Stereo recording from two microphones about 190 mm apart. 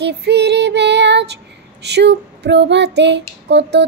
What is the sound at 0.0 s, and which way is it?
Child singing, 60° right (ahead or behind).